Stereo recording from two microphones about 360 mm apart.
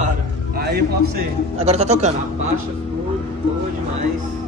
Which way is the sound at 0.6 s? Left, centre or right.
Right.